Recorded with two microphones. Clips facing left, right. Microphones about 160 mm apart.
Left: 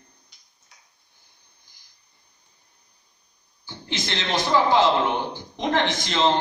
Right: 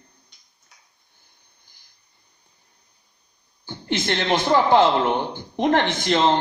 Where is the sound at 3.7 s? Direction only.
55° right (ahead or behind).